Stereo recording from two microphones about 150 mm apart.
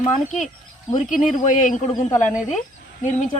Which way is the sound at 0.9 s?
55° left (ahead or behind).